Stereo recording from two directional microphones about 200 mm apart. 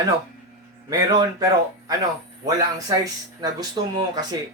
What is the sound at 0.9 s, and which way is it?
Speech, 20° right (ahead or behind).